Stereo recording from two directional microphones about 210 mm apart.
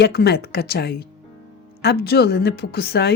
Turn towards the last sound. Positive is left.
turn(degrees=50)  # may be behind; listen again after turning